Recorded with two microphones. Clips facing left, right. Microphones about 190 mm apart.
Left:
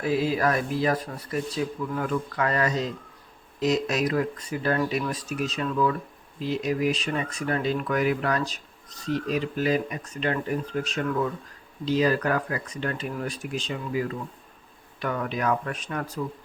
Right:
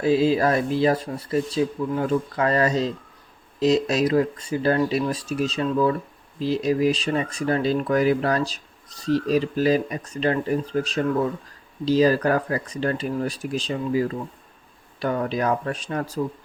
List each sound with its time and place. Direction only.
0.0 s speech: 25° right (ahead or behind)